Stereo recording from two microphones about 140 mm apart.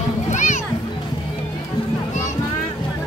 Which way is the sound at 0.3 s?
60° left (ahead or behind).